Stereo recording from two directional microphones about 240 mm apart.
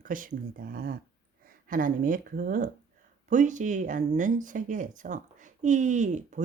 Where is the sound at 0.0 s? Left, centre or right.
Right.